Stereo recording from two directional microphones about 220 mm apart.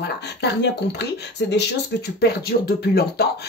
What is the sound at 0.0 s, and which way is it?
Speech, 50° left (ahead or behind).